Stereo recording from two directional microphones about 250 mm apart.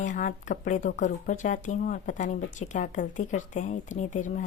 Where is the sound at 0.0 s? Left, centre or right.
Left.